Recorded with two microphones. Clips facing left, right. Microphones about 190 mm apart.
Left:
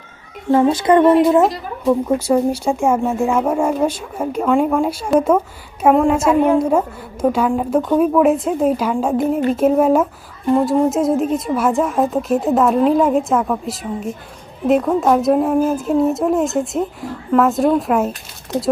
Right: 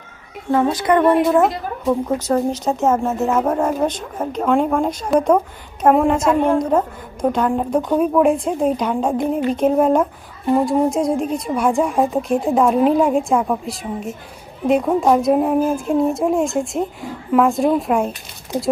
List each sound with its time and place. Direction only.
0.5 s a woman's voice: 25° left (ahead or behind)
2.1 s a woman's voice: 10° left (ahead or behind)
14.7 s a woman's voice: centre (ahead or behind)